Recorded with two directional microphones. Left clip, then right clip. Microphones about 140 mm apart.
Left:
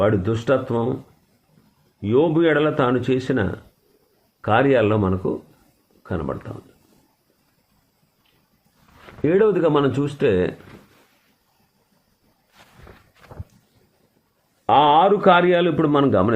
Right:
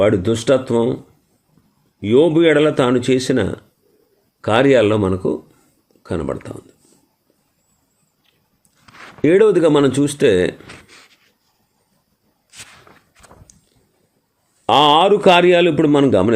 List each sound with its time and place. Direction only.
0.0 s a man's voice: 45° right (ahead or behind)
2.0 s a man's voice: 45° right (ahead or behind)
9.2 s a man's voice: 50° right (ahead or behind)
14.7 s a man's voice: 40° right (ahead or behind)